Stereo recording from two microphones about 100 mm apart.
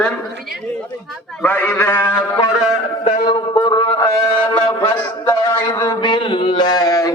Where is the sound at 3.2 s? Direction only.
50° left (ahead or behind).